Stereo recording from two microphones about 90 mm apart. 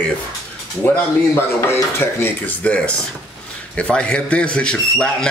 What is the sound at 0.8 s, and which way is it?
Speech, 30° left (ahead or behind).